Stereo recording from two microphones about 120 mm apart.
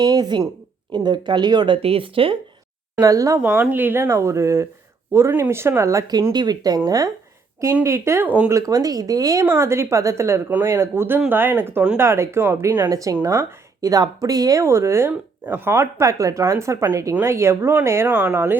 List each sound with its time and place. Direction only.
0.0 s speech: 35° right (ahead or behind)
3.0 s speech: 30° right (ahead or behind)
3.4 s speech: 15° right (ahead or behind)
8.4 s speech: 25° right (ahead or behind)
12.9 s speech: 30° right (ahead or behind)